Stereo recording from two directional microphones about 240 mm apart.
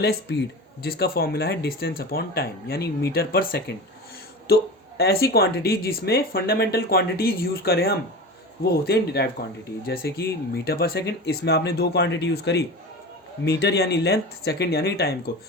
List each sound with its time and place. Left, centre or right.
0.0 s speech: left